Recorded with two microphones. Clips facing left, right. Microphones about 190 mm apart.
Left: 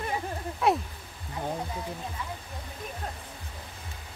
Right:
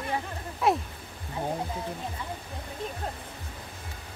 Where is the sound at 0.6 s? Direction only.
Centre (ahead or behind).